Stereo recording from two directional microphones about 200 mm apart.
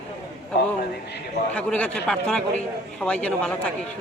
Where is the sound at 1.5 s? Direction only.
5° left (ahead or behind).